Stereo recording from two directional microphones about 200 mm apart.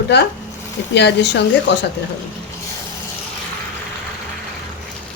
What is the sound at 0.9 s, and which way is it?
Speech, 60° left (ahead or behind).